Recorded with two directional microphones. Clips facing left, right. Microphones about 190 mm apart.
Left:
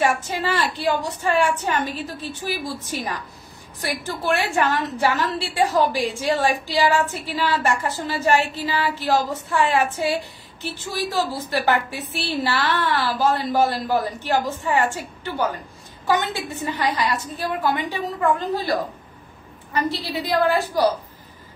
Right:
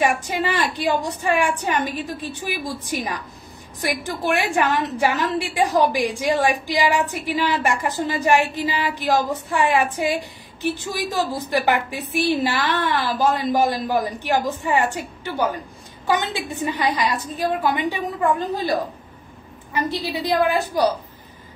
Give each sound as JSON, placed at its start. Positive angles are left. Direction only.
{"t": 0.0, "sound": "a woman's voice", "side_deg": -15}
{"t": 19.9, "sound": "a woman's voice", "side_deg": -15}